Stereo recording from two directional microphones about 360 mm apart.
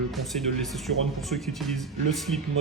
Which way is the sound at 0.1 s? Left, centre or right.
Centre.